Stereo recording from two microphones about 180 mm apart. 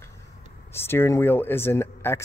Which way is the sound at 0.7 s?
15° left (ahead or behind).